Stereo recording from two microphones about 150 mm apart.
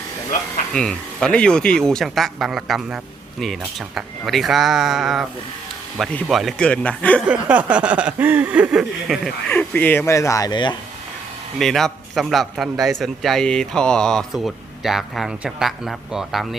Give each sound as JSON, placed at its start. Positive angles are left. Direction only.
{"t": 0.7, "sound": "speech", "side_deg": 5}
{"t": 7.3, "sound": "speech", "side_deg": -10}
{"t": 9.6, "sound": "speech", "side_deg": 10}
{"t": 11.6, "sound": "speech", "side_deg": 0}